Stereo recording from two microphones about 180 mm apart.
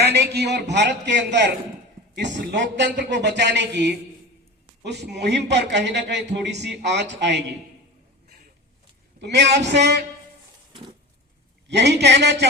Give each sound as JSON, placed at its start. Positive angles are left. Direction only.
{"t": 0.0, "sound": "a man's voice", "side_deg": -65}
{"t": 9.2, "sound": "a man's voice", "side_deg": -70}
{"t": 11.7, "sound": "a man's voice", "side_deg": -70}